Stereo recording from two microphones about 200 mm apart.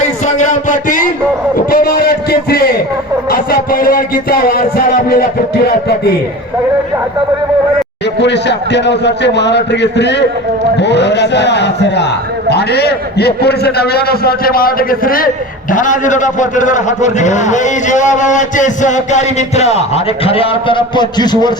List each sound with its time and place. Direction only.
0.0 s a sound: 35° left (ahead or behind)
3.2 s music: 45° left (ahead or behind)
8.2 s a man's voice: 60° left (ahead or behind); by 21.5 s 20° left (ahead or behind)